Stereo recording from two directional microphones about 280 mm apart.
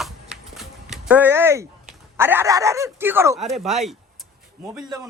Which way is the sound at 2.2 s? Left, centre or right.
Centre.